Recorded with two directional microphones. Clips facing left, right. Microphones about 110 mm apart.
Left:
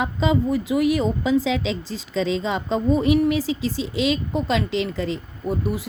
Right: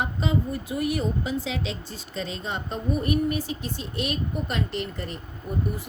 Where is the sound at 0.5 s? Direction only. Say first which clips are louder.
Left 7 dB; 90° left.